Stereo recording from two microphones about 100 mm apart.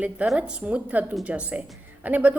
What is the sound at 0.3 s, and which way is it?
A woman's voice, 10° right (ahead or behind).